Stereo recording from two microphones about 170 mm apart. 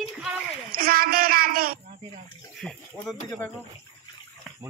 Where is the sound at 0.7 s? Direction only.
60° right (ahead or behind).